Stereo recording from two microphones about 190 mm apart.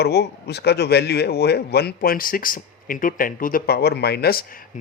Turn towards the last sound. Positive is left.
turn(degrees=55)  # may be behind; listen again after turning